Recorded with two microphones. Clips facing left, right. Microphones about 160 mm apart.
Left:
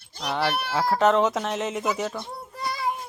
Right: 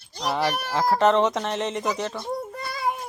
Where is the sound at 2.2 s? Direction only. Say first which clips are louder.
Right 3 dB; 45° right (ahead or behind).